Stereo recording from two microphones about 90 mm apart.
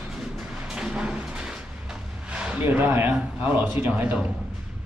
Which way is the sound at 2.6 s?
25° right (ahead or behind).